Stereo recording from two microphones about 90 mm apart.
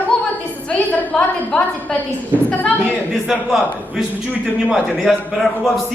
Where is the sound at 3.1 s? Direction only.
5° right (ahead or behind).